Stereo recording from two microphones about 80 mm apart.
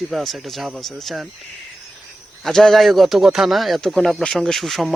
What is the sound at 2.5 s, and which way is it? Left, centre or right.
Speech, centre.